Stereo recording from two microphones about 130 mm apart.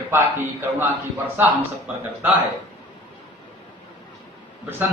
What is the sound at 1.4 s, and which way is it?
Speech, 10° right (ahead or behind).